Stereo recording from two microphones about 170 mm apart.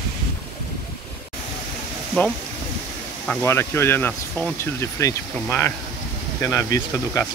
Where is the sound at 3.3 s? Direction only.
10° left (ahead or behind).